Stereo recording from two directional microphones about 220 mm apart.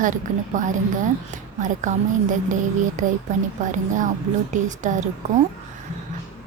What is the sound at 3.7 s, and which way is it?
Speech, 35° right (ahead or behind).